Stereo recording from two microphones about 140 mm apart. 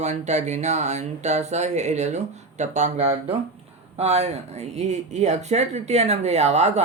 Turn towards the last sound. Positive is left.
turn(degrees=-50)  # may be behind; listen again after turning